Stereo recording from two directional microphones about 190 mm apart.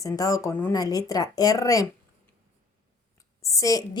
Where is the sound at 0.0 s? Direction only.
15° left (ahead or behind).